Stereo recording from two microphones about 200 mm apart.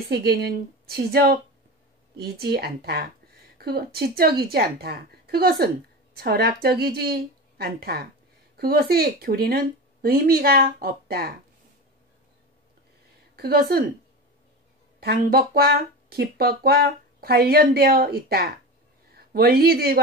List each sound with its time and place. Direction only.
0.1 s speech: 55° right (ahead or behind)
13.4 s speech: 50° right (ahead or behind)
15.0 s speech: 50° right (ahead or behind)